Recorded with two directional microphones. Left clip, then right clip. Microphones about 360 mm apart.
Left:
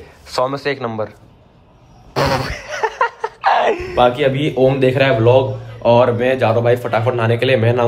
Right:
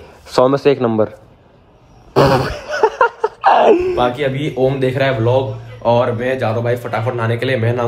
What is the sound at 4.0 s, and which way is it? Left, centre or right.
Speech, centre.